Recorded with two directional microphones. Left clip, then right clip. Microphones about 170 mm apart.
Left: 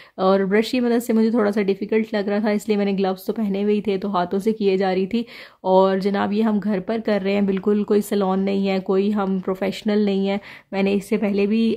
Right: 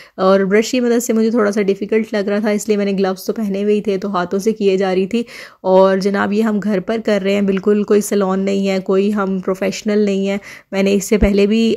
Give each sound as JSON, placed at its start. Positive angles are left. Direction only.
{"t": 0.2, "sound": "speech", "side_deg": -15}